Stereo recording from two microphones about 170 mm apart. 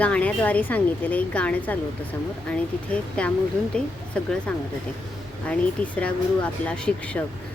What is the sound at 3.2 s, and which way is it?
Speech, 5° left (ahead or behind).